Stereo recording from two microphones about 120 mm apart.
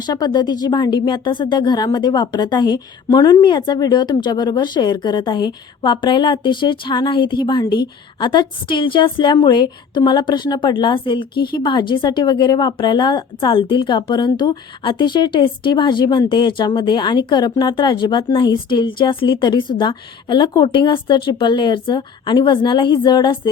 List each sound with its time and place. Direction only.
0.0 s a woman's voice: 35° left (ahead or behind)